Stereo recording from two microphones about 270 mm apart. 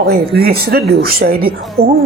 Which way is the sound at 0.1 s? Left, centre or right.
Right.